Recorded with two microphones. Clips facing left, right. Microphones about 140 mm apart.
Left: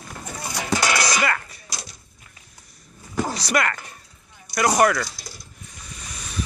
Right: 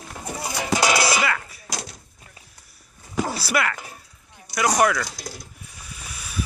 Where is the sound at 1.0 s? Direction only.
5° right (ahead or behind).